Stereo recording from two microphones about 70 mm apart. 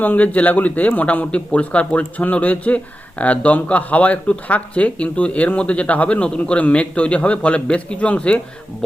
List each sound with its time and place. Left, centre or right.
0.0 s a man's voice: left